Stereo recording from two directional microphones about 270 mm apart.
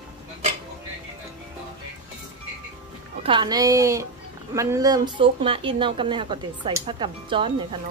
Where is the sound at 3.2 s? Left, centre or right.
Centre.